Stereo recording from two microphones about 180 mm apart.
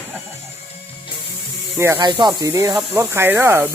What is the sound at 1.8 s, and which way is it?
Speech, 15° right (ahead or behind).